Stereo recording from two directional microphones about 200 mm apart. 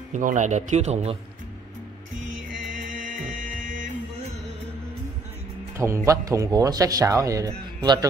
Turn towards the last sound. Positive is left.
turn(degrees=-20)  # may be behind; listen again after turning